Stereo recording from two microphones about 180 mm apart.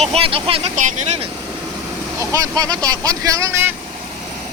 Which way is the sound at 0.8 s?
45° right (ahead or behind).